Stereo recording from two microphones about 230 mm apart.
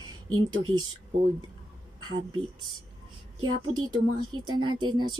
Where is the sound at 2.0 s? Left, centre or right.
Right.